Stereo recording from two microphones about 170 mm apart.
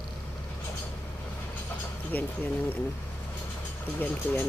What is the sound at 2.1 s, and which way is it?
Speech, 10° left (ahead or behind).